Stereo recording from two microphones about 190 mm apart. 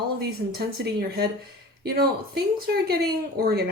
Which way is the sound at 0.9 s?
55° right (ahead or behind).